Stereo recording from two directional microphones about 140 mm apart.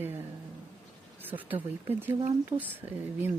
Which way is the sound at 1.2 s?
15° right (ahead or behind).